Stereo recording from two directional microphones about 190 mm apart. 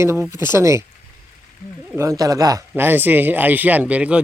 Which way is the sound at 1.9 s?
15° right (ahead or behind).